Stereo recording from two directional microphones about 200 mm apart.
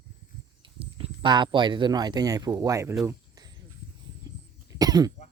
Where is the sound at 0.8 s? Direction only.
25° right (ahead or behind).